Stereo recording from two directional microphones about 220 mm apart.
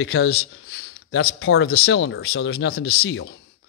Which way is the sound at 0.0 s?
65° left (ahead or behind).